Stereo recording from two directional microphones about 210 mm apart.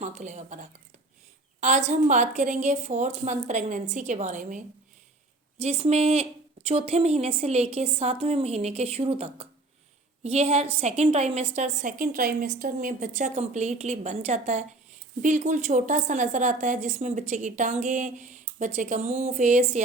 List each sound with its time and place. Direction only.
0.0 s a woman's voice: 35° right (ahead or behind)